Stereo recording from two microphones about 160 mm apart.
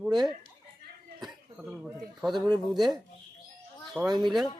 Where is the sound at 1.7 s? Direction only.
5° right (ahead or behind).